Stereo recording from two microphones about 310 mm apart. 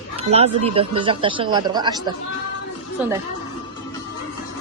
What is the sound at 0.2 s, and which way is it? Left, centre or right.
Speech, centre.